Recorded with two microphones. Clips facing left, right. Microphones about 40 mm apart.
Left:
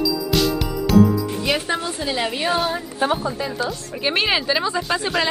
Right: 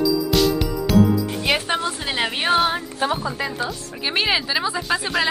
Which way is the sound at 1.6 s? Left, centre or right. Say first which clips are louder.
Even; right.